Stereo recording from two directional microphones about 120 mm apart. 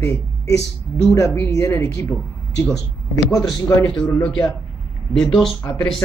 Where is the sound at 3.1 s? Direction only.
30° left (ahead or behind).